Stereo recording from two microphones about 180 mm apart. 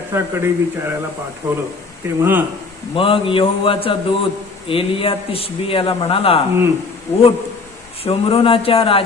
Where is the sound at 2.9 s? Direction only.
30° left (ahead or behind).